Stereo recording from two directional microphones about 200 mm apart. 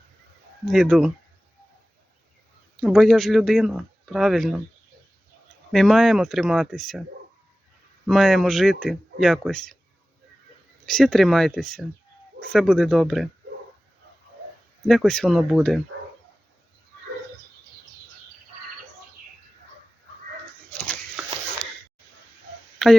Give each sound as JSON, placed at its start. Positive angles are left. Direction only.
{"t": 0.7, "sound": "speech", "side_deg": 0}
{"t": 2.8, "sound": "speech", "side_deg": 0}
{"t": 5.7, "sound": "speech", "side_deg": 0}
{"t": 8.0, "sound": "speech", "side_deg": 0}
{"t": 10.8, "sound": "speech", "side_deg": 0}
{"t": 14.8, "sound": "speech", "side_deg": 0}
{"t": 22.8, "sound": "speech", "side_deg": 5}